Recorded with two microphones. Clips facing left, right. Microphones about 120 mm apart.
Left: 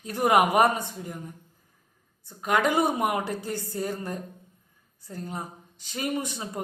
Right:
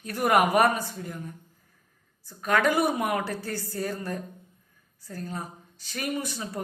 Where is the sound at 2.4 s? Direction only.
20° left (ahead or behind).